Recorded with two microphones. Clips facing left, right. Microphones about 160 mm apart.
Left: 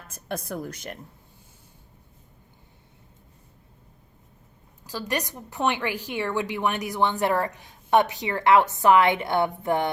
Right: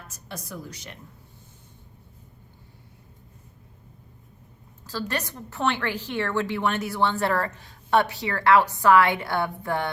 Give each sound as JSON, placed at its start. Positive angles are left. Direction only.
{"t": 0.1, "sound": "a woman's voice", "side_deg": 55}
{"t": 4.9, "sound": "a woman's voice", "side_deg": 15}